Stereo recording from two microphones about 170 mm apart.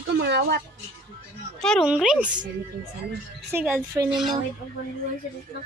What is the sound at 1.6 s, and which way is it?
Speech, centre (ahead or behind).